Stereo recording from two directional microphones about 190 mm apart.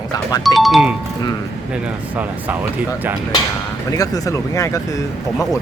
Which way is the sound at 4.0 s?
20° left (ahead or behind).